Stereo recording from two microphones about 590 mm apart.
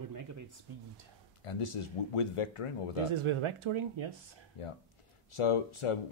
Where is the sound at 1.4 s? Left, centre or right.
Left.